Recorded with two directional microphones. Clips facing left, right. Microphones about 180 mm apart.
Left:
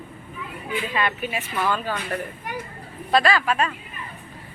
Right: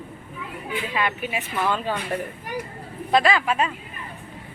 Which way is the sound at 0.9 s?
10° right (ahead or behind).